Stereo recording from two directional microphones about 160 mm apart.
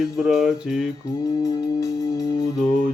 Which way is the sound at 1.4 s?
20° left (ahead or behind).